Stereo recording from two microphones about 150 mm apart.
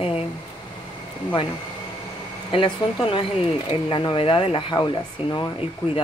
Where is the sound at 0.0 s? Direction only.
40° left (ahead or behind).